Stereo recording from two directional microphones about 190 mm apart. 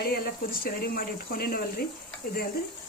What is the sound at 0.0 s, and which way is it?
Speech, 50° left (ahead or behind).